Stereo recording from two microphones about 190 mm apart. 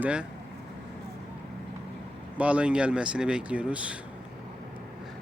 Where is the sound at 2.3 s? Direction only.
5° right (ahead or behind).